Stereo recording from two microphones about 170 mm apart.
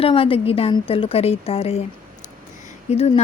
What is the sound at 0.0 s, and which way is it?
Speech, 35° left (ahead or behind).